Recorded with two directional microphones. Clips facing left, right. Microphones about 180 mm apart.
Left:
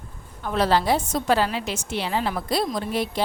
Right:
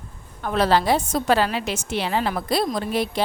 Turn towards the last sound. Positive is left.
turn(degrees=-75)  # may be behind; listen again after turning